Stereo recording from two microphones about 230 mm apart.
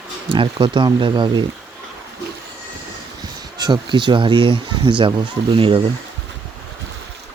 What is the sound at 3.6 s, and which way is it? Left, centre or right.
Speech, centre.